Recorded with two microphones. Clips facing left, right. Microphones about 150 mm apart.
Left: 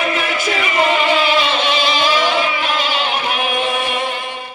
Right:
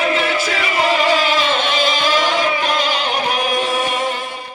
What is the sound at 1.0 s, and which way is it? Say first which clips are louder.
Music: even; 40° right (ahead or behind).